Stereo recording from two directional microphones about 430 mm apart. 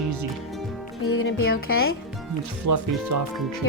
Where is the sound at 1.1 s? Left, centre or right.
Left.